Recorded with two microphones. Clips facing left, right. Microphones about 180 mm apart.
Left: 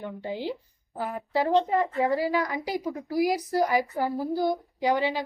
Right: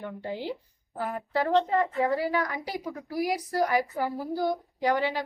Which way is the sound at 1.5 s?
15° left (ahead or behind).